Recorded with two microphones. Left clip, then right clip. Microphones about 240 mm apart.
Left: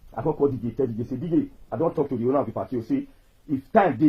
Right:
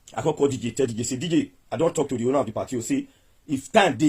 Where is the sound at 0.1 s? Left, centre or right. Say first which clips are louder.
Right 1 dB; right.